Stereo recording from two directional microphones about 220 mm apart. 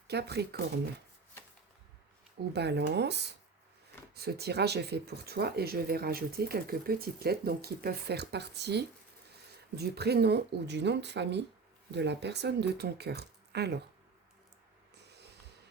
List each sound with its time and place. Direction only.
0.1 s speech: 50° right (ahead or behind)
2.5 s speech: 50° right (ahead or behind)